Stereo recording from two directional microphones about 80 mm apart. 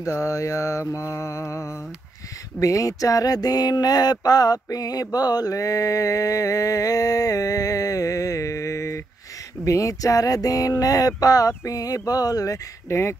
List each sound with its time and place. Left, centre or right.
0.0 s mantra: left
2.6 s a sound: left
12.8 s speech: left